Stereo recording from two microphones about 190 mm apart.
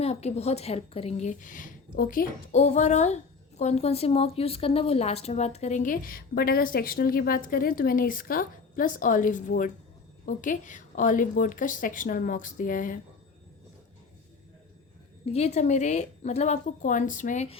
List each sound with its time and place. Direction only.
0.0 s a woman's voice: 35° left (ahead or behind)
15.3 s a woman's voice: 35° left (ahead or behind)